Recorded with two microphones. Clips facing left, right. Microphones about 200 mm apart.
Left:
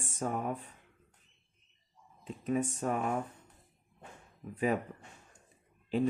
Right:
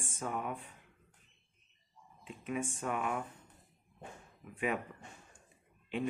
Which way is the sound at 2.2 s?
40° left (ahead or behind).